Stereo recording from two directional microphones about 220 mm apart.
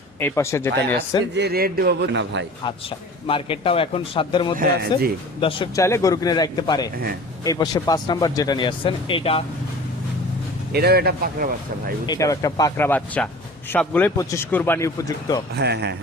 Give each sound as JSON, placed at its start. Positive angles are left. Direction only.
{"t": 0.2, "sound": "speech", "side_deg": 10}
{"t": 1.4, "sound": "speech", "side_deg": -45}
{"t": 3.2, "sound": "speech", "side_deg": 25}
{"t": 4.5, "sound": "speech", "side_deg": -45}
{"t": 5.4, "sound": "speech", "side_deg": 25}
{"t": 10.7, "sound": "speech", "side_deg": -45}
{"t": 12.0, "sound": "speech", "side_deg": 15}
{"t": 15.5, "sound": "speech", "side_deg": -50}